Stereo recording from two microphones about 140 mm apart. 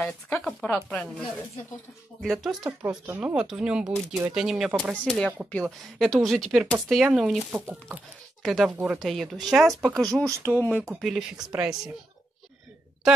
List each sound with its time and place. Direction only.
0.0 s speech: 5° left (ahead or behind)
2.2 s speech: centre (ahead or behind)
8.4 s speech: centre (ahead or behind)
9.0 s speech: centre (ahead or behind)
10.2 s speech: 20° right (ahead or behind)
10.6 s speech: 5° left (ahead or behind)
11.0 s speech: 5° right (ahead or behind)